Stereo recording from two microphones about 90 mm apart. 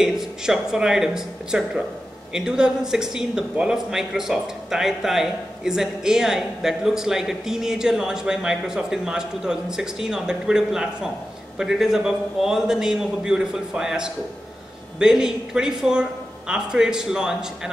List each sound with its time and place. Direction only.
0.0 s speech: 5° right (ahead or behind)